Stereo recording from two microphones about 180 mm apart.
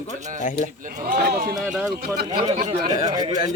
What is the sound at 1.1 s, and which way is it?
Speech, 60° right (ahead or behind).